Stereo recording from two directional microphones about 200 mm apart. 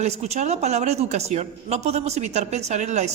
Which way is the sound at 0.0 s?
35° right (ahead or behind).